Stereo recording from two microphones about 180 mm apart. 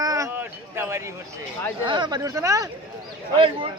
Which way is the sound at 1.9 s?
25° right (ahead or behind).